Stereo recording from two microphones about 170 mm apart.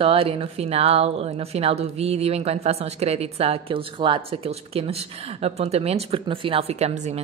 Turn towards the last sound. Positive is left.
turn(degrees=-40)  # may be behind; listen again after turning